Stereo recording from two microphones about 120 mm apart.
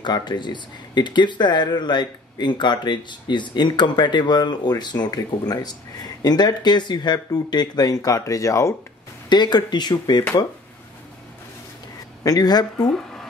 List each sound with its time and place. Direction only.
0.0 s speech: 35° left (ahead or behind)
9.3 s speech: 40° left (ahead or behind)
12.2 s speech: 30° left (ahead or behind)